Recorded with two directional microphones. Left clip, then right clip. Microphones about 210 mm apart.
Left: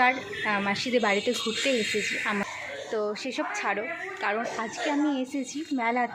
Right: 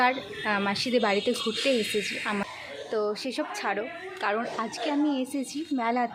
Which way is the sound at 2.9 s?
15° right (ahead or behind).